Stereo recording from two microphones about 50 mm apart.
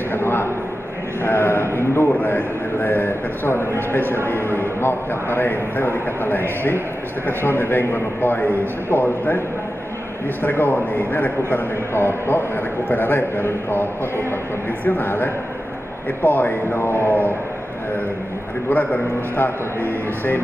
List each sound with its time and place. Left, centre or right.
0.1 s a sound: left
1.2 s a man's voice: left
2.0 s a man's voice: left
10.4 s a man's voice: left
18.7 s a man's voice: left